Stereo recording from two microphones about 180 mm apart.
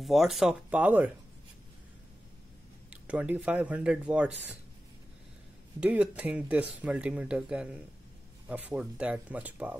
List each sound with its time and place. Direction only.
0.0 s speech: centre (ahead or behind)
2.9 s speech: 10° right (ahead or behind)
5.8 s speech: 5° right (ahead or behind)